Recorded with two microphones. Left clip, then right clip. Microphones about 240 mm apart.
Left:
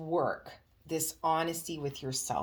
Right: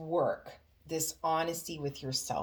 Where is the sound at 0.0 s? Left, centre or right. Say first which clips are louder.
Even; left.